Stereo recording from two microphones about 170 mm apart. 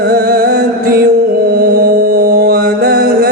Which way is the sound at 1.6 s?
60° right (ahead or behind).